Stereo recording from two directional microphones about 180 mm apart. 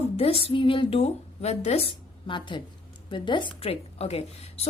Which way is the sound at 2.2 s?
25° left (ahead or behind).